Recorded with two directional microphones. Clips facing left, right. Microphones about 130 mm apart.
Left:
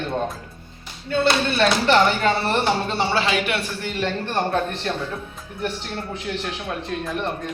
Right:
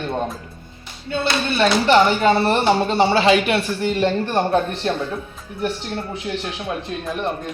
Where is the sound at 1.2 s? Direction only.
10° right (ahead or behind).